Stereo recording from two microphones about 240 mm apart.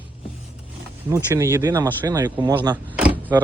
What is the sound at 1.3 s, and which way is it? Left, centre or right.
Speech, centre.